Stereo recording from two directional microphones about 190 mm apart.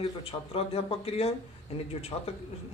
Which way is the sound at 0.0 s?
30° left (ahead or behind).